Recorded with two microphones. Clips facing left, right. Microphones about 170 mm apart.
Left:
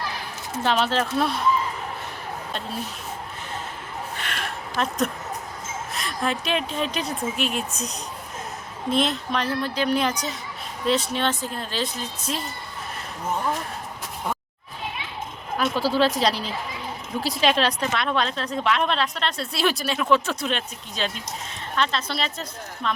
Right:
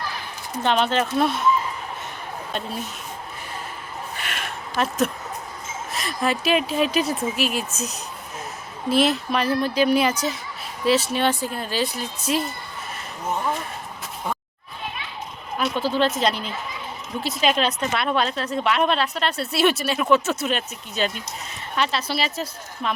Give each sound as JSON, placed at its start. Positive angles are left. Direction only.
{"t": 0.6, "sound": "a woman's voice", "side_deg": 0}
{"t": 2.5, "sound": "speech", "side_deg": 0}
{"t": 4.2, "sound": "a sound", "side_deg": -5}
{"t": 5.9, "sound": "a woman's voice", "side_deg": 0}
{"t": 15.7, "sound": "a woman's voice", "side_deg": 5}
{"t": 16.1, "sound": "speech", "side_deg": 35}
{"t": 17.4, "sound": "a woman's voice", "side_deg": -5}